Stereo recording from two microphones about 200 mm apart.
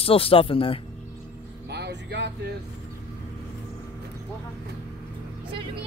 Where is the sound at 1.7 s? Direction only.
55° right (ahead or behind).